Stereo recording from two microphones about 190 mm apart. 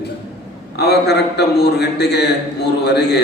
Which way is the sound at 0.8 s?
60° left (ahead or behind).